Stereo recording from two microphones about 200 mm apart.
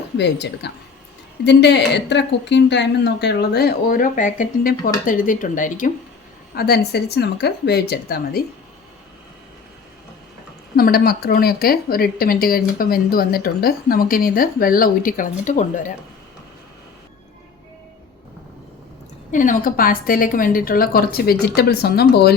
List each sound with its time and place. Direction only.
0.2 s speech: 60° left (ahead or behind); by 5.9 s 40° left (ahead or behind)
6.6 s speech: 50° left (ahead or behind)
10.8 s speech: 50° left (ahead or behind)
19.3 s speech: 40° left (ahead or behind)